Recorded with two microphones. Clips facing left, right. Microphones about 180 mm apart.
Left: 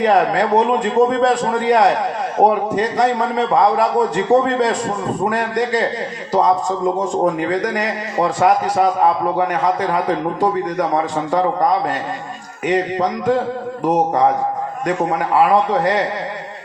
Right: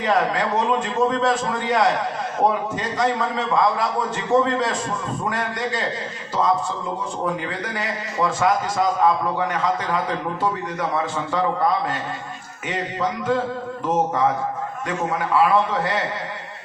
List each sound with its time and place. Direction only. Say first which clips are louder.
0.0 s a man's voice: left 6 dB; 35° left (ahead or behind)